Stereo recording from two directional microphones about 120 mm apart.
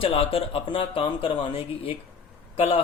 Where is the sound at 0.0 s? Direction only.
50° left (ahead or behind).